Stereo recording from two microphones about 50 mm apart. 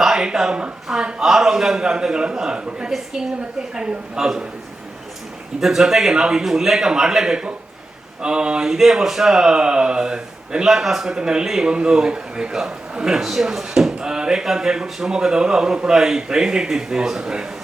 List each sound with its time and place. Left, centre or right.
0.0 s speech: centre
5.5 s speech: centre